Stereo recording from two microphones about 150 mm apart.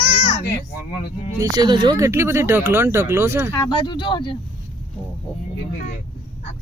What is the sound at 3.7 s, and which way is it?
Speech, 30° left (ahead or behind).